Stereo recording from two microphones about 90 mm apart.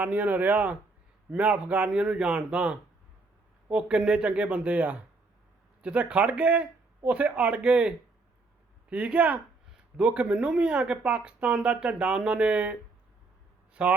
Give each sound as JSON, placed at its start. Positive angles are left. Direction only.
{"t": 0.0, "sound": "speech", "side_deg": -15}
{"t": 13.8, "sound": "speech", "side_deg": -15}